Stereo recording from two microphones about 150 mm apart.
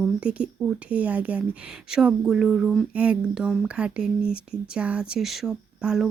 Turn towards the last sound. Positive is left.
turn(degrees=-5)  # may be behind; listen again after turning